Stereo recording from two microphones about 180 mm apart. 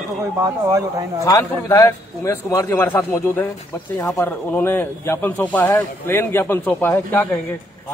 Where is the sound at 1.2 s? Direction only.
20° left (ahead or behind).